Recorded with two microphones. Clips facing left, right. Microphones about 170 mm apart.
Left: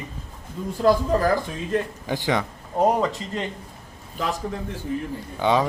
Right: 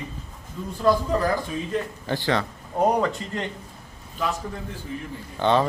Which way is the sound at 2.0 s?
15° left (ahead or behind).